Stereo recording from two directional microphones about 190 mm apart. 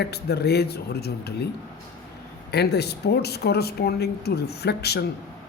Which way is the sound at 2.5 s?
60° left (ahead or behind).